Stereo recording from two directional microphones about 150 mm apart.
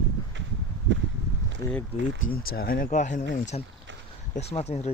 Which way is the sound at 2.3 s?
80° left.